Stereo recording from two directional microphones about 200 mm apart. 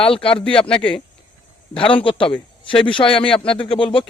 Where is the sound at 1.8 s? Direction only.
25° left (ahead or behind).